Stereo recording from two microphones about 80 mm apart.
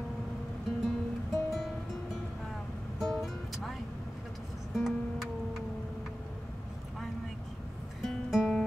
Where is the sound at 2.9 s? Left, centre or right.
Centre.